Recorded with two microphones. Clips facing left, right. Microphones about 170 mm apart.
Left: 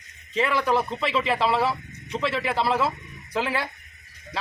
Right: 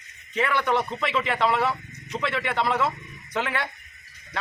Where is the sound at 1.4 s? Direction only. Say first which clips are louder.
Right 1 dB; 30° left (ahead or behind).